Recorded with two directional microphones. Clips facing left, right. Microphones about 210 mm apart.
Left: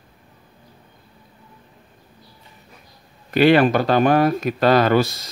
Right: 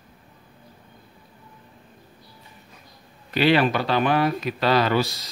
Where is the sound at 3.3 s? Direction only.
50° left (ahead or behind).